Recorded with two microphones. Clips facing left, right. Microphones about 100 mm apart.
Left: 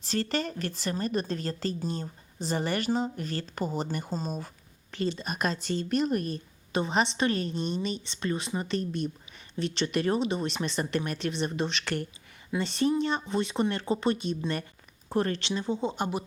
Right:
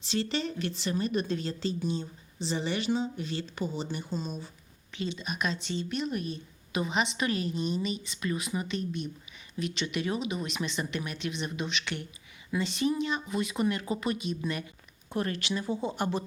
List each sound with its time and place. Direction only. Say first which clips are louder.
0.0 s a woman's voice: left 1 dB; 45° left (ahead or behind); by 16.2 s 20° left (ahead or behind)